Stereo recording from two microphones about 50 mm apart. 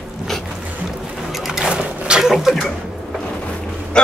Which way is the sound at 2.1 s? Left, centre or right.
Centre.